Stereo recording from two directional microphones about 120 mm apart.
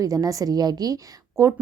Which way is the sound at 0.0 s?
30° right (ahead or behind).